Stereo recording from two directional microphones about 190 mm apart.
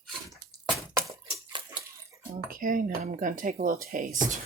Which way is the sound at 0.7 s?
15° right (ahead or behind).